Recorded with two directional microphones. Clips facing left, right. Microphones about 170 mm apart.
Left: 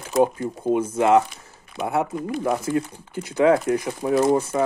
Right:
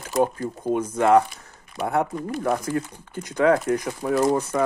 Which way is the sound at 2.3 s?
Centre (ahead or behind).